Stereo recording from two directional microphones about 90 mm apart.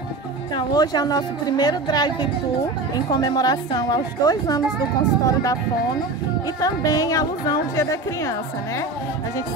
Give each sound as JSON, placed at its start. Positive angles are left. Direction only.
{"t": 0.6, "sound": "a woman's voice", "side_deg": 50}
{"t": 6.6, "sound": "a woman's voice", "side_deg": 40}